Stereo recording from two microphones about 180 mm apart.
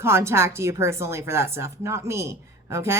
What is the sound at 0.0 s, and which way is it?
Speech, 15° right (ahead or behind).